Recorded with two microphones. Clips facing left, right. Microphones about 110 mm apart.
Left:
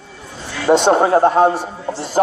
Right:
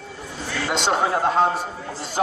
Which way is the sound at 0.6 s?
40° left (ahead or behind).